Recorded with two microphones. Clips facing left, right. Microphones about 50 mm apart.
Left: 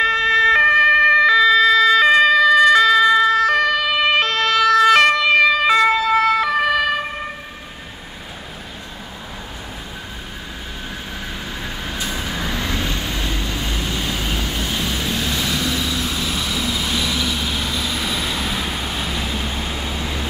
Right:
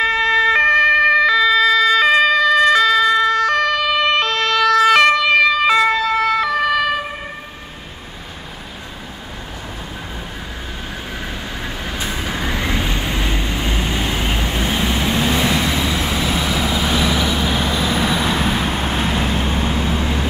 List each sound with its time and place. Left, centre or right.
0.0 s emergency vehicle: centre
12.4 s vehicle: right